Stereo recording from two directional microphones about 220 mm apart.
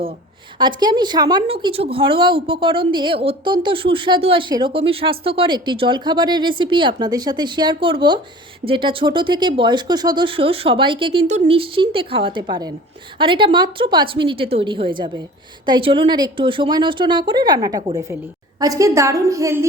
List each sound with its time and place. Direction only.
0.6 s a woman's voice: 20° right (ahead or behind)